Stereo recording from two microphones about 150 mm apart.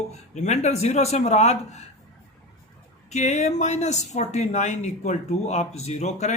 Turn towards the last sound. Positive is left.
turn(degrees=50)  # may be behind; listen again after turning